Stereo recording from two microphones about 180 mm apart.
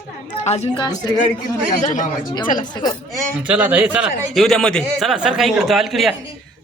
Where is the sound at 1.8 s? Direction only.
45° left (ahead or behind).